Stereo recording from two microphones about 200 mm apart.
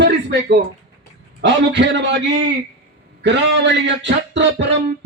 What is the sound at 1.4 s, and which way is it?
Speech, 60° right (ahead or behind).